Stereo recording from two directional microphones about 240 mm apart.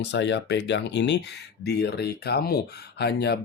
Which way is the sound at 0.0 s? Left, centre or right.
Left.